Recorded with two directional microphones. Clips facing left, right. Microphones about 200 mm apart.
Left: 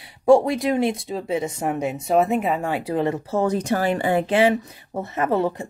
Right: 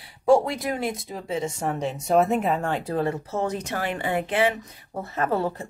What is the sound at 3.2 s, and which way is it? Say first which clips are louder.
Speech: left 6 dB; 35° left (ahead or behind).